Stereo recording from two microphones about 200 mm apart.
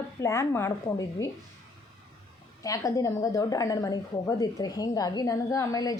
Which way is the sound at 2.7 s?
15° left (ahead or behind).